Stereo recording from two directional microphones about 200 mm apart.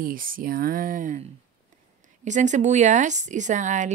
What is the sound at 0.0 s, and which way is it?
A woman's voice, 45° right (ahead or behind).